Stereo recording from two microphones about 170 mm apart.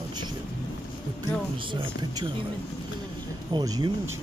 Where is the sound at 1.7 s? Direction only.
30° right (ahead or behind).